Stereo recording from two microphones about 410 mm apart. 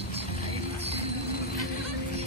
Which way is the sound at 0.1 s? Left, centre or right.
Centre.